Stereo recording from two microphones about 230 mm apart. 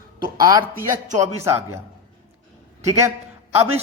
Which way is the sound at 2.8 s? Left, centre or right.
Centre.